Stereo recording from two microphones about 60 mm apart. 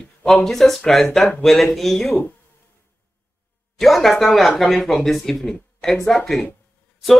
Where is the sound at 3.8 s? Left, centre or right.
Centre.